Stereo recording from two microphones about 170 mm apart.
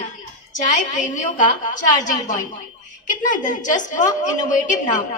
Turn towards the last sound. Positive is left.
turn(degrees=50)  # may be behind; listen again after turning